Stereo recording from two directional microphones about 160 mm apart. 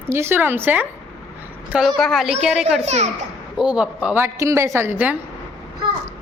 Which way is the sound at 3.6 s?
5° right (ahead or behind).